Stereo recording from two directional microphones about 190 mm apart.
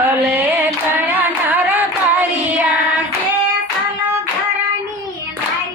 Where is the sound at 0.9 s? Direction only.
10° right (ahead or behind).